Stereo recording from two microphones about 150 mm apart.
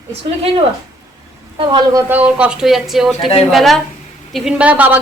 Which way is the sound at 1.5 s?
35° right (ahead or behind).